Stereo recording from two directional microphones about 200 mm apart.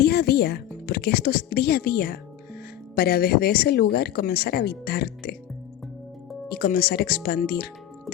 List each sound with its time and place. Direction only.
0.0 s speech: 55° left (ahead or behind)
6.5 s speech: 50° left (ahead or behind)